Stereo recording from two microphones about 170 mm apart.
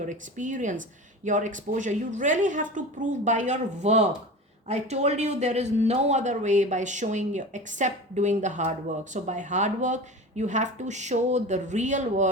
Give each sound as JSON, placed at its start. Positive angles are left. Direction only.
{"t": 0.0, "sound": "speech", "side_deg": -45}